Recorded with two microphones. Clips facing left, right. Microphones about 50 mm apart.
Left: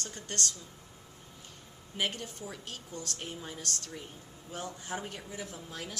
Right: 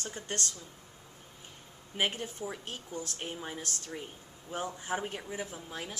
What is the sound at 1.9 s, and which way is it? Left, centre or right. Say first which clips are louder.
Speech: right 2 dB; right.